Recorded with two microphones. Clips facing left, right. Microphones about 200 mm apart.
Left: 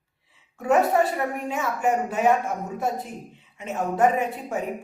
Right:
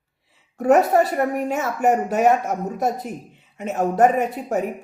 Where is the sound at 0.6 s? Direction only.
45° right (ahead or behind).